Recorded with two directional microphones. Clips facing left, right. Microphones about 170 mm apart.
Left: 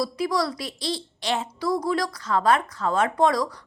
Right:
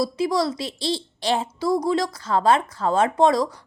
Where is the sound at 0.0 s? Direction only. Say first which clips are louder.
Right 3 dB; 25° right (ahead or behind).